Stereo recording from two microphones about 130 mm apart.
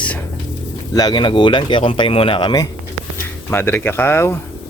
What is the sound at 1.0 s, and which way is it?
Speech, 35° left (ahead or behind).